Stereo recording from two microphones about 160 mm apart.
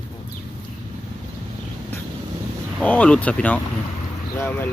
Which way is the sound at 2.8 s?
10° left (ahead or behind).